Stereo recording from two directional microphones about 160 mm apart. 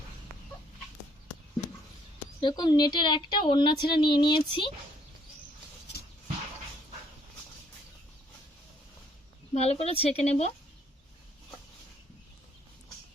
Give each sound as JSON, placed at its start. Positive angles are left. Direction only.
{"t": 2.4, "sound": "a woman's voice", "side_deg": 30}
{"t": 9.6, "sound": "speech", "side_deg": 40}